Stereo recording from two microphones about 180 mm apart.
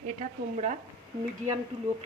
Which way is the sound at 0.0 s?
40° right (ahead or behind).